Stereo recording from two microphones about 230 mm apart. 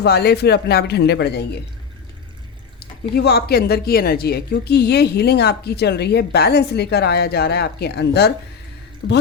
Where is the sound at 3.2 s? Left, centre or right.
Left.